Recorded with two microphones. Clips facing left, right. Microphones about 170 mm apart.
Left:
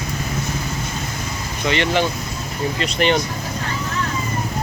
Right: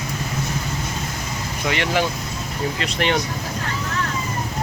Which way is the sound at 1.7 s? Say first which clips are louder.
Left 2 dB; 5° right (ahead or behind).